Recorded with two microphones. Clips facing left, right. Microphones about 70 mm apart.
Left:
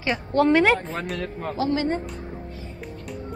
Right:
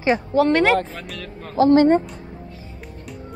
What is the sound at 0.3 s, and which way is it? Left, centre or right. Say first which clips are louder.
Speech: even; centre.